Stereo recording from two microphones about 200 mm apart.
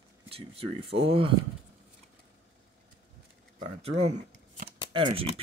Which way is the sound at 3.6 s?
35° right (ahead or behind).